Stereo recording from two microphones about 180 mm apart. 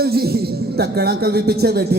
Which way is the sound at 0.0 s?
60° right (ahead or behind).